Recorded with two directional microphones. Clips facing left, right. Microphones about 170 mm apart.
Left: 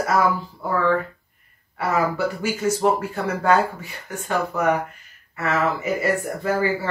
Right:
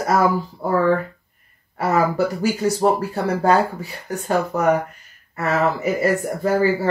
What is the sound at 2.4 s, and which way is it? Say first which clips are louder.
Speech: right 1 dB; 35° right (ahead or behind).